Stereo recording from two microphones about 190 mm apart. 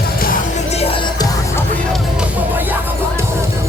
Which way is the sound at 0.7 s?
30° left (ahead or behind).